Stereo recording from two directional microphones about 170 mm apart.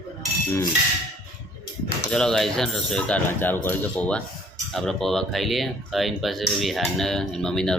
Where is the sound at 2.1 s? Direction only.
5° left (ahead or behind).